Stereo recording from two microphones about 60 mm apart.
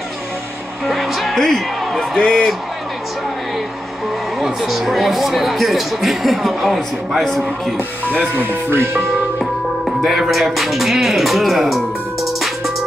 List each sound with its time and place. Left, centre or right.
0.8 s music: centre
4.4 s speech: centre
8.2 s speech: right
8.6 s speech: right
9.4 s music: centre